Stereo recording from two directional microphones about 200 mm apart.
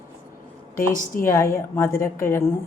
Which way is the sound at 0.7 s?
40° left (ahead or behind).